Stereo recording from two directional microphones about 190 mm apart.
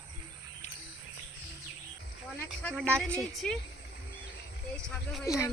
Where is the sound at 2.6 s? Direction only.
5° left (ahead or behind).